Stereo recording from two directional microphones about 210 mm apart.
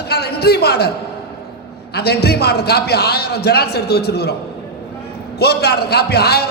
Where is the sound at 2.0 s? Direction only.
50° left (ahead or behind).